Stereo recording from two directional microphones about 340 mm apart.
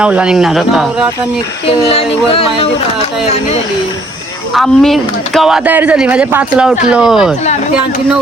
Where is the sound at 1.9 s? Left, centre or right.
Centre.